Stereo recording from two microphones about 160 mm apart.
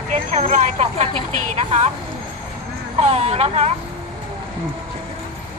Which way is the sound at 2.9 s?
40° right (ahead or behind).